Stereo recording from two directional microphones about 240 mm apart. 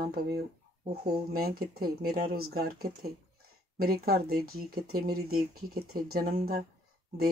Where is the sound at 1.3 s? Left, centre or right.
Right.